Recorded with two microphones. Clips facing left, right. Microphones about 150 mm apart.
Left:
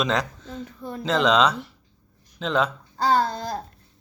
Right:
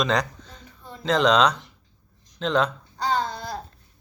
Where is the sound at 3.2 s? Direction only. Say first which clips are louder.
Left 3 dB; 45° left (ahead or behind).